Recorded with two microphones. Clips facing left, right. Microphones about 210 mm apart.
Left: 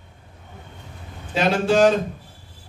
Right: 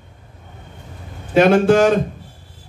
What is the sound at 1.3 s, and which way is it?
Speech, 55° right (ahead or behind).